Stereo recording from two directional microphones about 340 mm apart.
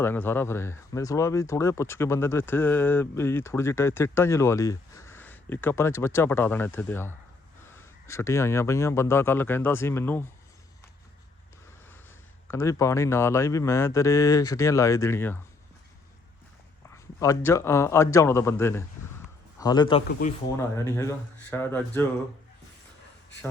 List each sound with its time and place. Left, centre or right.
0.0 s speech: centre
12.5 s speech: centre
16.9 s a man's voice: centre
20.1 s a man's voice: left
20.7 s speech: centre